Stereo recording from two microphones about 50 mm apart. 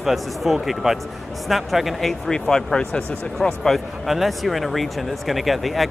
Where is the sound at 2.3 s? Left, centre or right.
Centre.